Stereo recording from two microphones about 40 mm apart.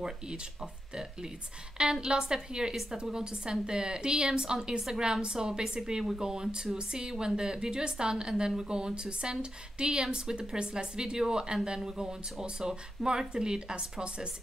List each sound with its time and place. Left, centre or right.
0.0 s a woman's voice: centre